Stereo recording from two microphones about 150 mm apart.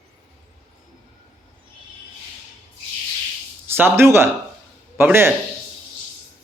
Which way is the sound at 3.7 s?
15° right (ahead or behind).